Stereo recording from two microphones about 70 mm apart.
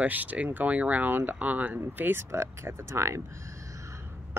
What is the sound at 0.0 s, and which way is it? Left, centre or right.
Speech, right.